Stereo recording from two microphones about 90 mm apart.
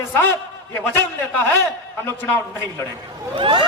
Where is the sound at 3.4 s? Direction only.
65° right (ahead or behind).